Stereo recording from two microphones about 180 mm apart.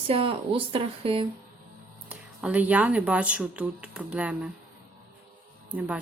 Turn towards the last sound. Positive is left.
turn(degrees=-10)  # may be behind; listen again after turning